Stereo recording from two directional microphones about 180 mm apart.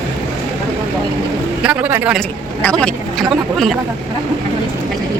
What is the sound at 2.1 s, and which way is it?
Speech, 5° left (ahead or behind).